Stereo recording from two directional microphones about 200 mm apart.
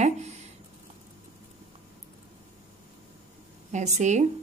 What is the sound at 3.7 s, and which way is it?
Speech, 35° right (ahead or behind).